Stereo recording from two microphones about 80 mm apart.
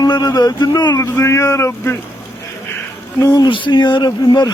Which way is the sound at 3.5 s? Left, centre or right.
Left.